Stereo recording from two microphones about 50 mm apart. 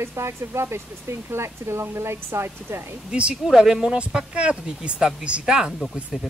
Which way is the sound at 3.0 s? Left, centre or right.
Centre.